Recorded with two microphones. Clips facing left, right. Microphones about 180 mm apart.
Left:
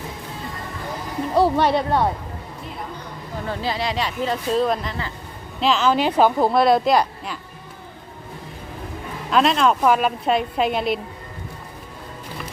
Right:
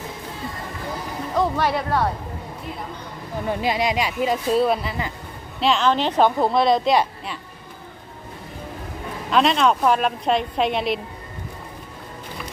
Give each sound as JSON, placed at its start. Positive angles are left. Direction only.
{"t": 1.4, "sound": "speech", "side_deg": 25}
{"t": 3.4, "sound": "speech", "side_deg": -15}
{"t": 5.5, "sound": "a woman's voice", "side_deg": 0}
{"t": 9.3, "sound": "a woman's voice", "side_deg": 0}